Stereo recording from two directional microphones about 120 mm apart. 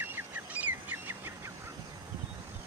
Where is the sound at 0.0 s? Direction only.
15° right (ahead or behind).